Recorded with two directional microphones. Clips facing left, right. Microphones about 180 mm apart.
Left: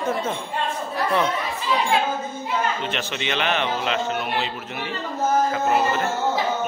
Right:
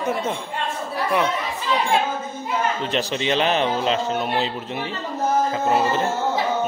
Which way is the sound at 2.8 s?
35° right (ahead or behind).